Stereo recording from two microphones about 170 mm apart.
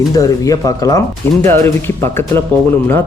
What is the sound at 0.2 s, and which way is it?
Speech, 20° left (ahead or behind).